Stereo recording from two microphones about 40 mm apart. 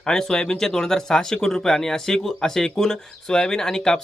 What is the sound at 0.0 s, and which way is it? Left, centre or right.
Speech, centre.